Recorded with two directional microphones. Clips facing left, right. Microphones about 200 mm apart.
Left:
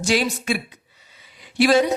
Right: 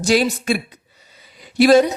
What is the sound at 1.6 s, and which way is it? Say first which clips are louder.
Speech: right 5 dB; 40° right (ahead or behind).